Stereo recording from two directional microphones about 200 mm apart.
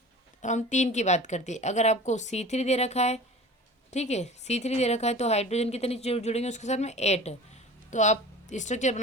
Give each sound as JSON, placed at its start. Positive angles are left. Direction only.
{"t": 0.4, "sound": "a woman's voice", "side_deg": 35}